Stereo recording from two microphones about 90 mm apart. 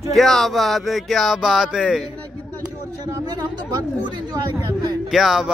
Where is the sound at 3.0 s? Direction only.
50° right (ahead or behind).